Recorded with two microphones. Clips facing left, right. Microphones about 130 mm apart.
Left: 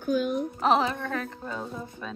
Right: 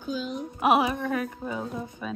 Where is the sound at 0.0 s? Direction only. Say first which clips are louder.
Left 6 dB; 55° left (ahead or behind).